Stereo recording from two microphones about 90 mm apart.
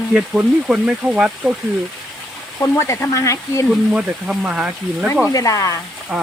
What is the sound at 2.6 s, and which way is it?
Speech, 30° left (ahead or behind).